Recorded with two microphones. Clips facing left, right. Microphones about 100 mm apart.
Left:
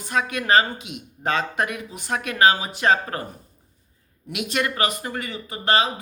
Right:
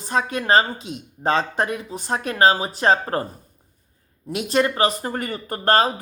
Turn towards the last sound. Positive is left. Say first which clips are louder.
# right 3 dB
turn(degrees=-45)  # may be behind; listen again after turning